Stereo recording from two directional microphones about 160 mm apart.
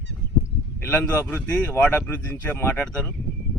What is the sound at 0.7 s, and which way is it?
A man's voice, 10° left (ahead or behind).